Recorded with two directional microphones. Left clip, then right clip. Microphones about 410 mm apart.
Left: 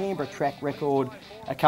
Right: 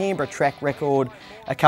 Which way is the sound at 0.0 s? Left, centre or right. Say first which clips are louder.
Right 6 dB; right.